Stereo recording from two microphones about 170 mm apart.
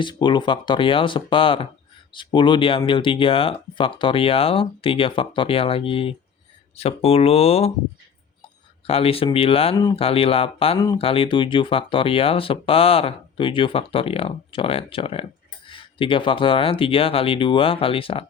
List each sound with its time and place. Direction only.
0.0 s speech: 30° left (ahead or behind)
8.9 s speech: 35° left (ahead or behind)